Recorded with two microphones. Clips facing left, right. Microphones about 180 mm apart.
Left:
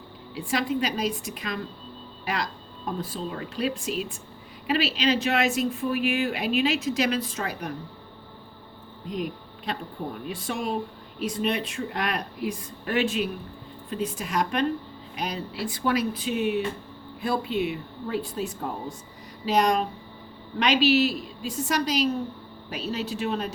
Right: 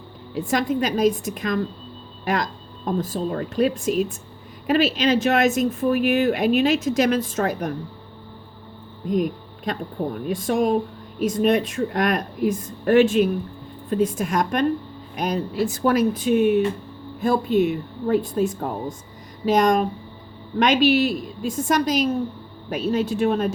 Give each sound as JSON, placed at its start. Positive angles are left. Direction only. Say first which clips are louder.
{"t": 0.3, "sound": "speech", "louder": "right 5 dB", "side_deg": -45}
{"t": 9.0, "sound": "speech", "louder": "right 9 dB", "side_deg": -45}